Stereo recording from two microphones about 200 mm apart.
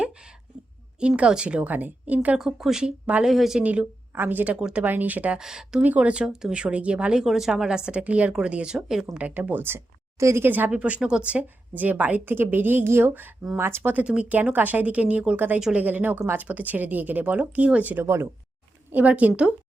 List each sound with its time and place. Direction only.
0.9 s a woman's voice: 5° right (ahead or behind)